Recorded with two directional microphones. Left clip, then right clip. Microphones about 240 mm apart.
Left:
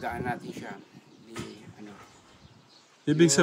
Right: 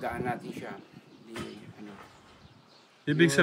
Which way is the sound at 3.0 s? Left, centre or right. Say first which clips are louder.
Left 2 dB; centre.